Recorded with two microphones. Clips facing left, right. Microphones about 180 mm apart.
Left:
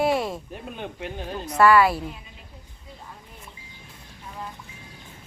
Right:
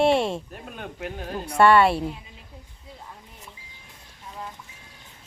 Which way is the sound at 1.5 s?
25° right (ahead or behind).